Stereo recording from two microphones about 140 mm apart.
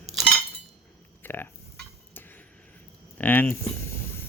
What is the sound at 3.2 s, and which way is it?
Speech, 15° left (ahead or behind).